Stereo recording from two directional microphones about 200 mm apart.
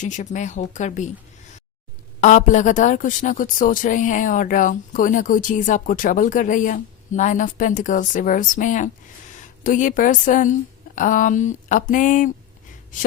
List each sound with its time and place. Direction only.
0.0 s speech: 35° left (ahead or behind)
2.2 s speech: 40° left (ahead or behind)